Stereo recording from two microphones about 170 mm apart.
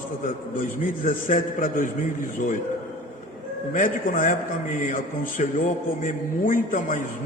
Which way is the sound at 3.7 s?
50° left (ahead or behind).